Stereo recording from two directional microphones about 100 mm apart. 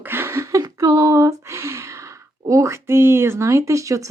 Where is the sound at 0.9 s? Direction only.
35° right (ahead or behind).